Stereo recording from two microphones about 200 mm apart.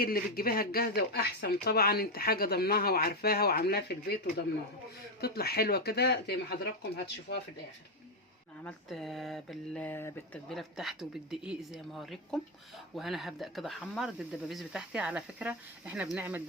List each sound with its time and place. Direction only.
0.0 s speech: 50° left (ahead or behind)
8.6 s speech: centre (ahead or behind)